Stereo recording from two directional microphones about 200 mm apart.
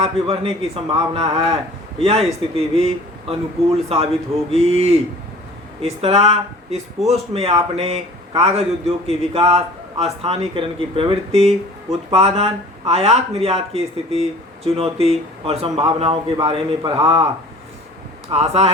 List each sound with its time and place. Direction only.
0.0 s a man's voice: 30° right (ahead or behind)
2.4 s a man's voice: 25° right (ahead or behind)
18.3 s a man's voice: 30° right (ahead or behind)